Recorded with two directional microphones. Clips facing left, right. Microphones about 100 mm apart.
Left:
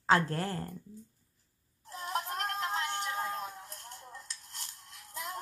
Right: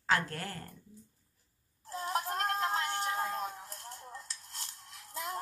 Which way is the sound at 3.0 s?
25° right (ahead or behind).